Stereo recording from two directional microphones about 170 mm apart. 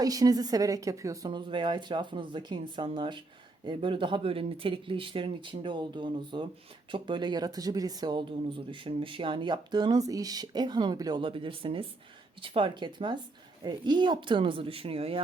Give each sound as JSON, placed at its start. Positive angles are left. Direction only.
{"t": 0.0, "sound": "speech", "side_deg": -20}